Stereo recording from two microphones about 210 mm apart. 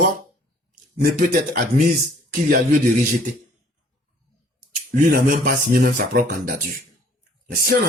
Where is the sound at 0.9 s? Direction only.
45° right (ahead or behind).